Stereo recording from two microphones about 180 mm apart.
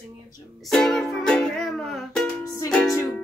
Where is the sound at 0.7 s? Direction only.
5° left (ahead or behind).